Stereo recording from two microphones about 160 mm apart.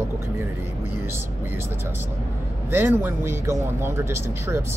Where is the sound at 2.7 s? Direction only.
10° right (ahead or behind).